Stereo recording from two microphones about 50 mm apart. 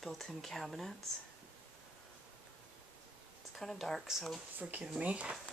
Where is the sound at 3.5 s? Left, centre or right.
Centre.